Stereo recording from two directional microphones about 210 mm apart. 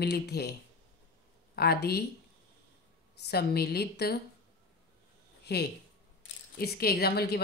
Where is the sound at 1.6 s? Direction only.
50° left (ahead or behind).